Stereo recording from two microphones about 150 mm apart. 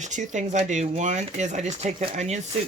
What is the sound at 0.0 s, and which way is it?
Speech, 55° right (ahead or behind).